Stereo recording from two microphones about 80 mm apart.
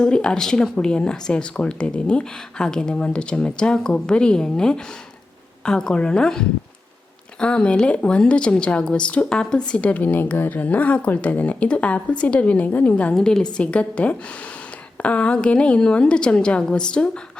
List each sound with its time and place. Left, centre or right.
0.0 s a woman's voice: centre